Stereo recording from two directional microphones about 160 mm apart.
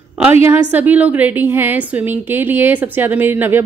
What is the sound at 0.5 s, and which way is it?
A woman's voice, 10° right (ahead or behind).